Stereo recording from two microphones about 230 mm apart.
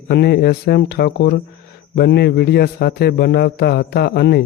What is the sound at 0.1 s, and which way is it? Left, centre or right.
Speech, left.